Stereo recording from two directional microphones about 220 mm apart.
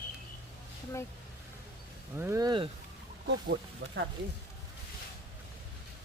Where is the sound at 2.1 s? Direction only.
10° right (ahead or behind).